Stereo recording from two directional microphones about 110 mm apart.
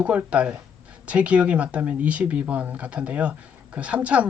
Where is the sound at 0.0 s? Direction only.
10° right (ahead or behind).